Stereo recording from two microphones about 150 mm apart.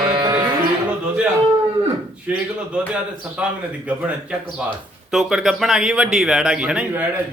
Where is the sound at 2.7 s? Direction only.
10° right (ahead or behind).